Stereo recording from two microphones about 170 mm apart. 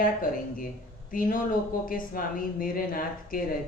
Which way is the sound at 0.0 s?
55° left (ahead or behind).